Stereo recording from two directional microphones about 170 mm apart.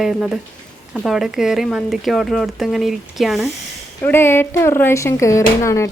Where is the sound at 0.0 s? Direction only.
5° right (ahead or behind).